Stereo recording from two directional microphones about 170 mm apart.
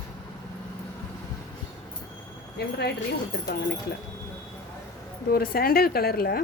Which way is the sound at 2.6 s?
75° left (ahead or behind).